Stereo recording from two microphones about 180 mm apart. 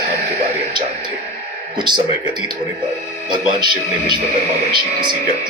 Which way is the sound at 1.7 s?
25° right (ahead or behind).